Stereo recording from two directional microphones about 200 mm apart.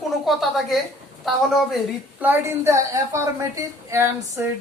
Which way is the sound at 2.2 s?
10° right (ahead or behind).